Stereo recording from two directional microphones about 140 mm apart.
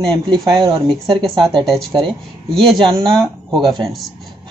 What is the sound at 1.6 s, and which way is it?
Speech, centre (ahead or behind).